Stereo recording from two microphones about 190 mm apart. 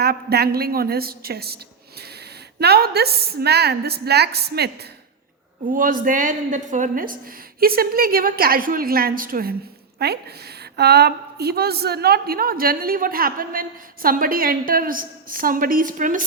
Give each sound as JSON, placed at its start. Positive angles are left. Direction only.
{"t": 0.0, "sound": "a woman's voice", "side_deg": -55}
{"t": 2.6, "sound": "a woman's voice", "side_deg": -60}
{"t": 5.7, "sound": "a woman's voice", "side_deg": -45}